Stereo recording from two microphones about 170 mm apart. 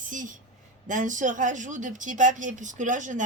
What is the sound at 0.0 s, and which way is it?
Speech, 50° right (ahead or behind).